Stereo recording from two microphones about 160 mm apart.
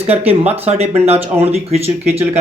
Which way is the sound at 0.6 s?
40° right (ahead or behind).